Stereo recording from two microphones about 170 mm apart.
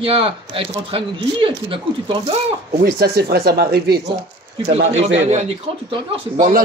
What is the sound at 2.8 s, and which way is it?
Speech, 65° right (ahead or behind).